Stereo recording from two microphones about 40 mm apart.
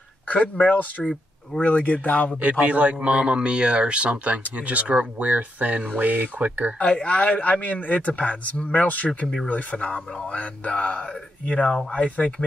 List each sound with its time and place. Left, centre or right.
0.3 s speech: left
2.6 s speech: right
6.8 s speech: left